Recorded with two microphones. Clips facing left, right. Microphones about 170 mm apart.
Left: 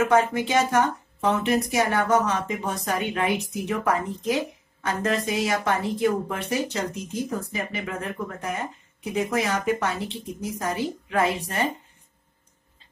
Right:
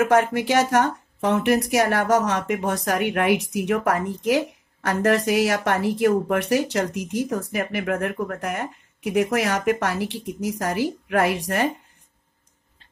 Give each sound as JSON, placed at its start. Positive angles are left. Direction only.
{"t": 0.0, "sound": "speech", "side_deg": -70}